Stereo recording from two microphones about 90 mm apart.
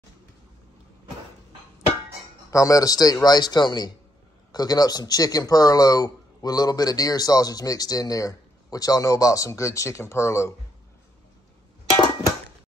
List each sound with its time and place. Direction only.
2.5 s speech: 40° left (ahead or behind)